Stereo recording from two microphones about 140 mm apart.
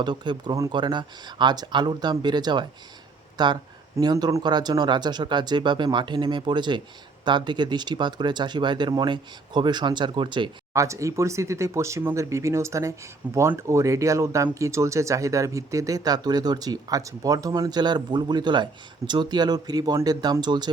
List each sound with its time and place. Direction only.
0.0 s speech: 30° right (ahead or behind)
10.8 s speech: 20° right (ahead or behind)